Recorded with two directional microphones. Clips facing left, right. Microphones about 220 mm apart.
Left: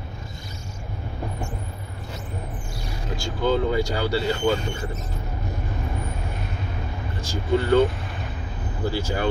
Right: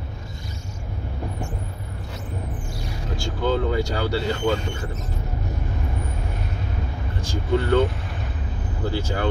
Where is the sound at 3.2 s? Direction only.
10° left (ahead or behind).